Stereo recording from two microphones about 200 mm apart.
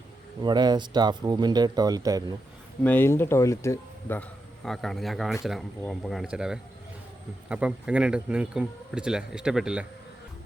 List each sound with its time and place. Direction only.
0.4 s speech: 20° right (ahead or behind)
2.8 s speech: 10° left (ahead or behind)